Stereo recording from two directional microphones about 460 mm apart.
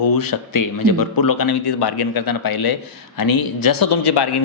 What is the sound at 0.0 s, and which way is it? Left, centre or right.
Speech, left.